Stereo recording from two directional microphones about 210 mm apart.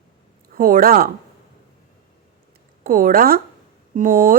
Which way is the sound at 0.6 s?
45° right (ahead or behind).